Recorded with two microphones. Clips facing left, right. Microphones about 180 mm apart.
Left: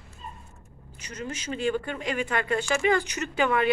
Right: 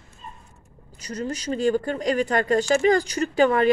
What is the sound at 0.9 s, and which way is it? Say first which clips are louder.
Speech: right 6 dB; 35° right (ahead or behind).